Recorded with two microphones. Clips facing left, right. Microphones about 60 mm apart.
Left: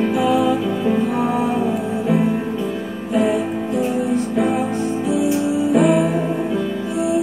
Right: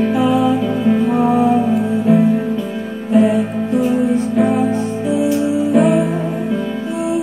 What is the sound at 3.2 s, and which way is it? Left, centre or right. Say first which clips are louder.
Music: right 4 dB; right.